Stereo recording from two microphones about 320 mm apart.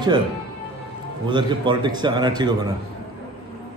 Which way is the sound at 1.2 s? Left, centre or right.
Centre.